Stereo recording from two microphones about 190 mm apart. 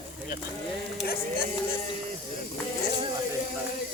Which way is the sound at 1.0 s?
50° left (ahead or behind).